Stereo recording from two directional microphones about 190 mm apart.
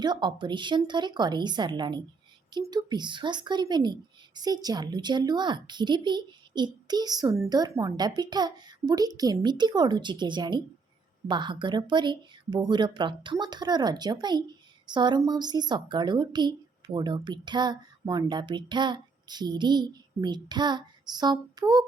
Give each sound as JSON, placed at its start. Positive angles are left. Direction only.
{"t": 0.0, "sound": "speech", "side_deg": -25}